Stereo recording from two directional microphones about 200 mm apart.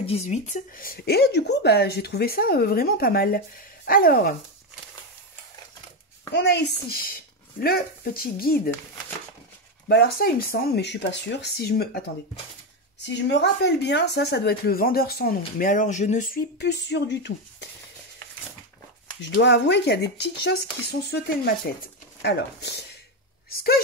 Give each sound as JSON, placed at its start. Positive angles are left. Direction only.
{"t": 0.0, "sound": "speech", "side_deg": 30}
{"t": 6.3, "sound": "speech", "side_deg": 60}
{"t": 9.8, "sound": "speech", "side_deg": 55}
{"t": 13.0, "sound": "speech", "side_deg": 60}
{"t": 16.5, "sound": "speech", "side_deg": 60}
{"t": 19.2, "sound": "speech", "side_deg": 60}